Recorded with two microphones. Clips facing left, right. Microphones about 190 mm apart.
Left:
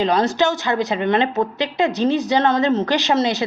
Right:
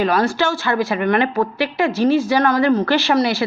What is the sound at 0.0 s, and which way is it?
A woman's voice, 20° left (ahead or behind).